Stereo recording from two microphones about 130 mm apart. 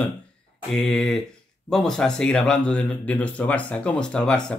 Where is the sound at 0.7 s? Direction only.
5° left (ahead or behind).